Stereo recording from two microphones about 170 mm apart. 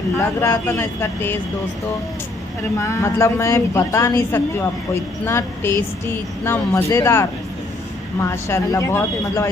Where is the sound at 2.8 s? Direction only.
15° left (ahead or behind).